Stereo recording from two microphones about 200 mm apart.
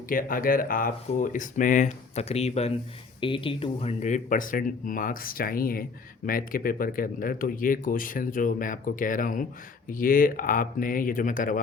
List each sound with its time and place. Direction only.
0.1 s speech: 45° left (ahead or behind)